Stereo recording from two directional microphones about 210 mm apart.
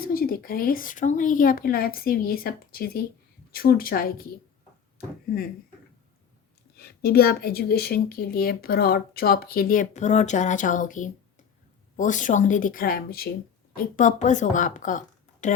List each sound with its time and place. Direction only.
0.0 s a woman's voice: 45° left (ahead or behind)
6.7 s a woman's voice: 50° left (ahead or behind)